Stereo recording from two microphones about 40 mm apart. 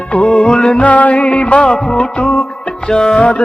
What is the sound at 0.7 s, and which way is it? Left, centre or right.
Music, left.